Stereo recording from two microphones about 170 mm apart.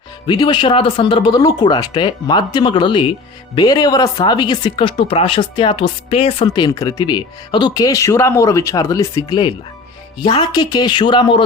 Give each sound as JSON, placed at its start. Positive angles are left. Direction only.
{"t": 0.3, "sound": "speech", "side_deg": 25}
{"t": 6.5, "sound": "speech", "side_deg": 25}